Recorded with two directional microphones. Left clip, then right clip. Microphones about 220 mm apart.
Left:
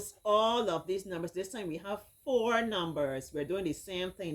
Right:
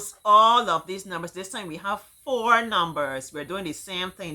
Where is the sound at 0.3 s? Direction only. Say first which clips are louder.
Right 11 dB; 10° right (ahead or behind).